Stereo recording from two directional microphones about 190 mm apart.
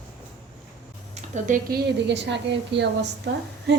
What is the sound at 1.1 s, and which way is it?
Speech, 40° right (ahead or behind).